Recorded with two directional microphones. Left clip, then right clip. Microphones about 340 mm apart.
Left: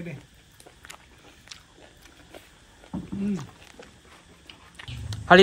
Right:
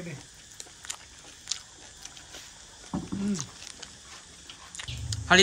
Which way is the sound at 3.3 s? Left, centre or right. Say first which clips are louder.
Right 1 dB; centre.